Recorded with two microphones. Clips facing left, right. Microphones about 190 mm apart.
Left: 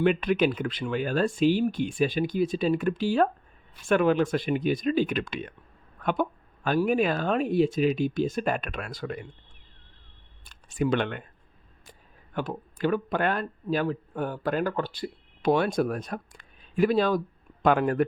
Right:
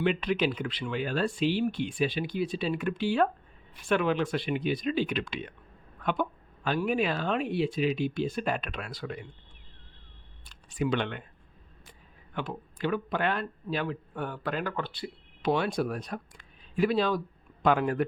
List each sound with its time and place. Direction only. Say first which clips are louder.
0.0 s speech: left 4 dB; 50° left (ahead or behind)
10.4 s a sound: left 3 dB; 45° left (ahead or behind)
11.9 s speech: left 4 dB; 40° left (ahead or behind)